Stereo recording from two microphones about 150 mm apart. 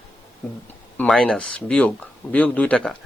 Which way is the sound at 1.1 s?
5° left (ahead or behind).